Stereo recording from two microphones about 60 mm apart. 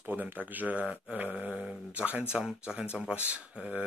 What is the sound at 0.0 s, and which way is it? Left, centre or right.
Speech, right.